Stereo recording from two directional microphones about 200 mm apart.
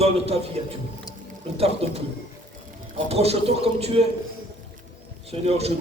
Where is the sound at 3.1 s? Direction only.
30° right (ahead or behind).